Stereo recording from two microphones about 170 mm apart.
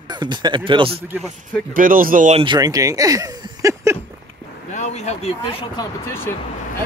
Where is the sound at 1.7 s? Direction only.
55° right (ahead or behind).